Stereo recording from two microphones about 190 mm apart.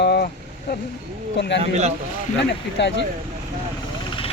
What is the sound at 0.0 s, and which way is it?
Vehicle, 60° left (ahead or behind).